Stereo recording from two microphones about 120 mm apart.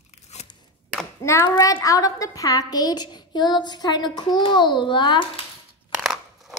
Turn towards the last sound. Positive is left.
turn(degrees=0)  # may be behind; listen again after turning